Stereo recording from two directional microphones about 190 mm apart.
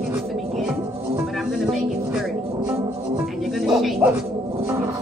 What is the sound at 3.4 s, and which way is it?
Music, centre (ahead or behind).